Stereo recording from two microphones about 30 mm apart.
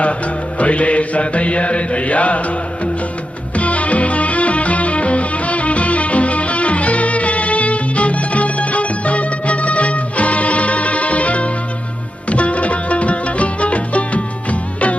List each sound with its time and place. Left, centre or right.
0.6 s mantra: left
3.5 s music: left